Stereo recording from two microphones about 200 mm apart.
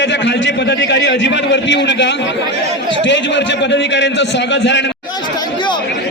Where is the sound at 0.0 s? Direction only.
65° left (ahead or behind).